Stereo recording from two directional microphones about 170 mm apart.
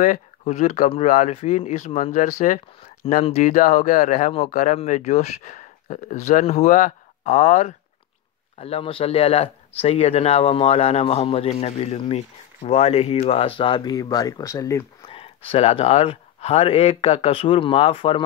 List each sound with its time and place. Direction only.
0.0 s speech: 45° left (ahead or behind); by 14.9 s 15° left (ahead or behind)
15.0 s speech: 35° left (ahead or behind)